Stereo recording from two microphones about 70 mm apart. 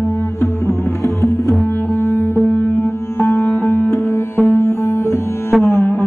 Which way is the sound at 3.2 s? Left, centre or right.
Left.